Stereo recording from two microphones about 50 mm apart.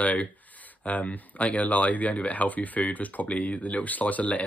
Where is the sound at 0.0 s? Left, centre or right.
Left.